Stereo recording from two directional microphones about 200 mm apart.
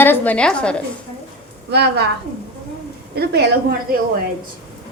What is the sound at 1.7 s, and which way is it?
Speech, 55° right (ahead or behind).